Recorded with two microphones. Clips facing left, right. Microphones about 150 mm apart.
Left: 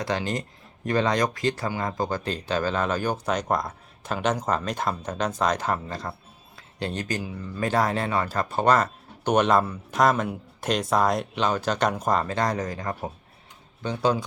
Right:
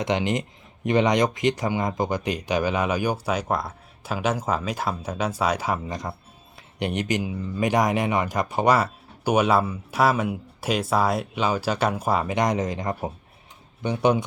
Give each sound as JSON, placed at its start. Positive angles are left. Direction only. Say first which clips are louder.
{"t": 0.0, "sound": "speech", "louder": "right 3 dB", "side_deg": -20}